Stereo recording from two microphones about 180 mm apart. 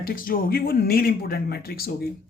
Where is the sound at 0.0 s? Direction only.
55° left (ahead or behind).